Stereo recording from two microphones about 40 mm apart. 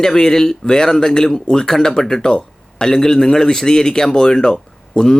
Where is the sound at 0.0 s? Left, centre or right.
Centre.